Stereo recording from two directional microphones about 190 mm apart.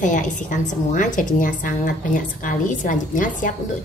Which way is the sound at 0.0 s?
40° left (ahead or behind).